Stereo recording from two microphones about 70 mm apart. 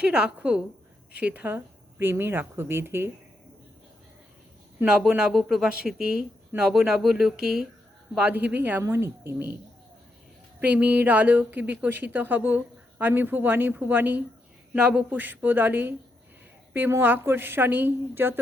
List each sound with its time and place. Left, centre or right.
0.1 s a woman's voice: centre; by 3.1 s right
4.9 s speech: centre
8.1 s a woman's voice: centre; by 9.5 s right
10.6 s a woman's voice: right